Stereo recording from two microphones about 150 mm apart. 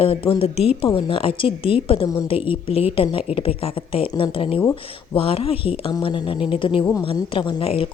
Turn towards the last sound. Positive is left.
turn(degrees=40)  # may be behind; listen again after turning